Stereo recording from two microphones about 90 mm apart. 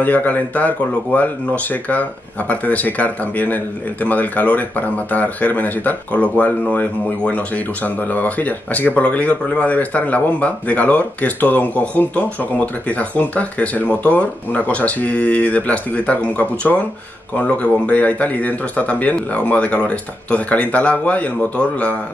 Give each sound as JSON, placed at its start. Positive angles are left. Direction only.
{"t": 0.0, "sound": "speech", "side_deg": 20}